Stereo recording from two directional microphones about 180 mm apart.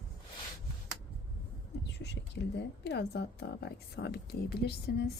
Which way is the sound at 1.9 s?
70° left (ahead or behind).